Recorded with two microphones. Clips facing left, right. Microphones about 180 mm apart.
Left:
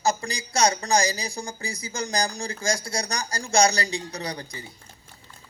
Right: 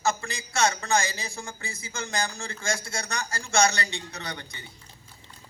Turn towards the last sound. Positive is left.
turn(degrees=35)  # may be behind; listen again after turning